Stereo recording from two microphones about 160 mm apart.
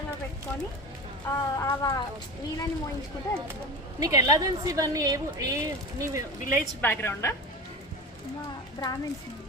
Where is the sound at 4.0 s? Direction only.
20° right (ahead or behind).